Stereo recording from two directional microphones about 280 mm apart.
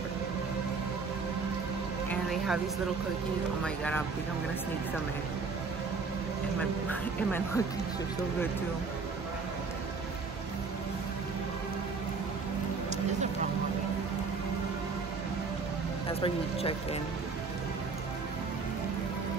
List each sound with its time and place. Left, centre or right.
2.0 s music: centre
3.6 s speech: centre
6.9 s speech: centre
16.1 s speech: centre